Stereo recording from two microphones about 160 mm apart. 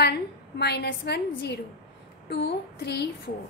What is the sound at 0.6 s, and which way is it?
A woman's voice, 90° left.